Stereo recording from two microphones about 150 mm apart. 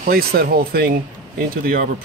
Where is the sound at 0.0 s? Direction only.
90° right.